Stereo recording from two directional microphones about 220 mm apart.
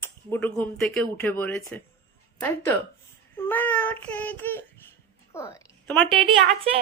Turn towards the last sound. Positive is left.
turn(degrees=-25)  # may be behind; listen again after turning